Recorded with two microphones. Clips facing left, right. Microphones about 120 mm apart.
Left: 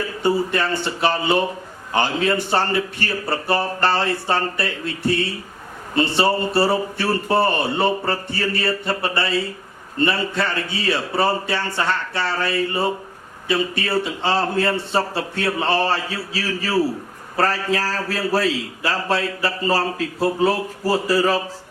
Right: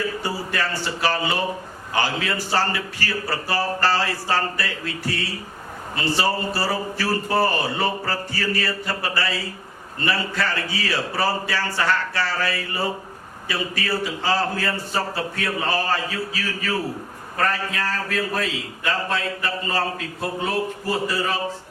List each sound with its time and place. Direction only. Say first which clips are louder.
0.2 s a man's voice: left 7 dB; 25° left (ahead or behind)